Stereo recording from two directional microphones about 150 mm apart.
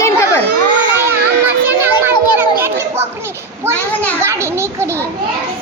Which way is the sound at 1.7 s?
15° right (ahead or behind).